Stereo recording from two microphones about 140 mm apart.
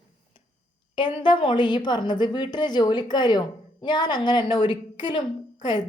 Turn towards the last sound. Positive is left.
turn(degrees=30)  # may be behind; listen again after turning